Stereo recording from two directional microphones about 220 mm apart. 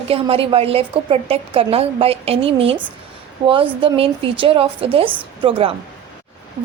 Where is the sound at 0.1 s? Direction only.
25° right (ahead or behind).